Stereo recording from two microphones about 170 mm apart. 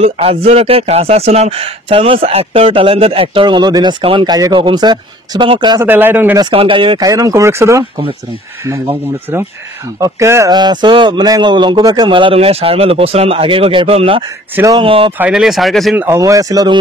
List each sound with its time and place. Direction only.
0.0 s speech: 35° right (ahead or behind)
5.9 s speech: 10° right (ahead or behind)
6.3 s speech: 30° right (ahead or behind)
14.5 s speech: 15° right (ahead or behind)
14.8 s speech: 30° right (ahead or behind)
15.1 s speech: 5° right (ahead or behind)
16.0 s speech: 15° right (ahead or behind)